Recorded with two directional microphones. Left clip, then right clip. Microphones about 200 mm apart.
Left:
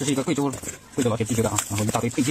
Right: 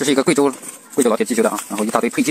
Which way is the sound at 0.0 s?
25° right (ahead or behind).